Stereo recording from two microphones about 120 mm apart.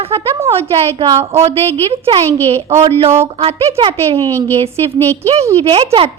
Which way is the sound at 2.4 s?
55° right (ahead or behind).